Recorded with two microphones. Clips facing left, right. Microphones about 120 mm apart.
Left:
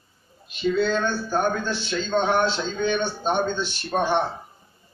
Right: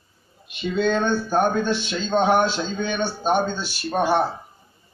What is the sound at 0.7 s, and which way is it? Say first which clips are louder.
Speech: right 4 dB; 20° right (ahead or behind).